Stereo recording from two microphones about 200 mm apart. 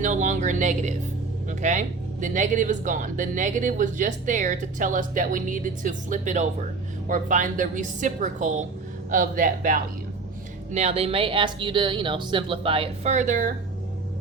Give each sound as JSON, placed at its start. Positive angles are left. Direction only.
{"t": 0.0, "sound": "speech", "side_deg": -40}
{"t": 10.7, "sound": "speech", "side_deg": -30}